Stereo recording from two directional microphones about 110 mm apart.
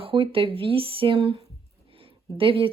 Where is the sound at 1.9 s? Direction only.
55° right (ahead or behind).